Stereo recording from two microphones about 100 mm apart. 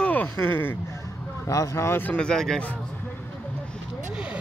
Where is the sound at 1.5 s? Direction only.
30° left (ahead or behind).